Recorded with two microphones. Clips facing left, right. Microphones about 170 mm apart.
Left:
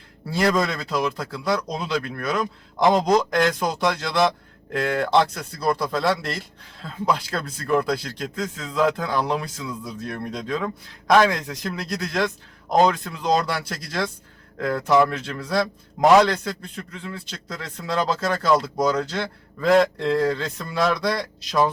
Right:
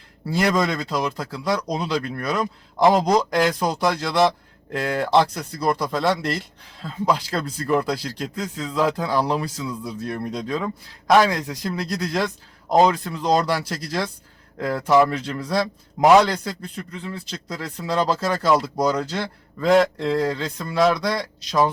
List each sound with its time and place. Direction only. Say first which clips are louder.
0.5 s a man's voice: right 1 dB; centre (ahead or behind)
18.1 s a man's voice: even; centre (ahead or behind)